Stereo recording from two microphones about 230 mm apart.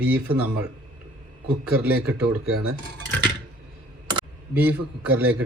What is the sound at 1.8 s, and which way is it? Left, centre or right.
Speech, centre.